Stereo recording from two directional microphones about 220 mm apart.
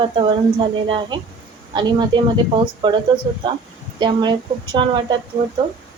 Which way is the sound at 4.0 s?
20° right (ahead or behind).